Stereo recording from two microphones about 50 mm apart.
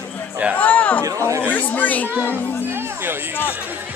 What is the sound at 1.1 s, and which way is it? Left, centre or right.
Speech, right.